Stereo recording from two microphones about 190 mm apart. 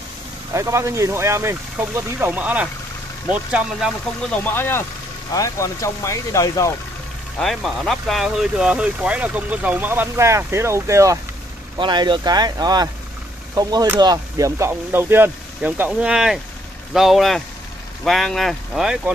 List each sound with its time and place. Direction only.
0.5 s speech: 15° right (ahead or behind)
4.3 s speech: 10° left (ahead or behind)
7.3 s speech: centre (ahead or behind)